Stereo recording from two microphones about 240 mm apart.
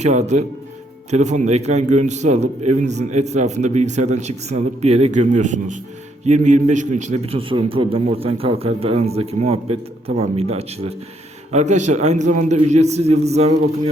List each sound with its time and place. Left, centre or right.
0.0 s a man's voice: right